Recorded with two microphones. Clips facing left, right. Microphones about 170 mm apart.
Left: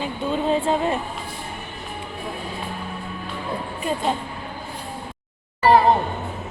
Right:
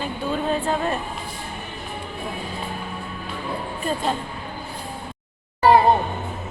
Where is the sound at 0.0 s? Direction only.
20° left (ahead or behind).